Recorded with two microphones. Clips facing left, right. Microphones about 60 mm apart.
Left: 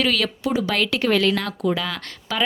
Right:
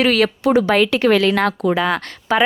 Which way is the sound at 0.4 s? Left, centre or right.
Right.